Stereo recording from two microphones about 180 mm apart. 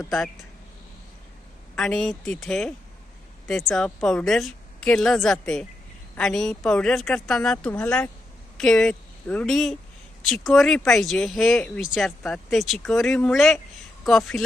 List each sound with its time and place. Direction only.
1.7 s speech: 5° left (ahead or behind)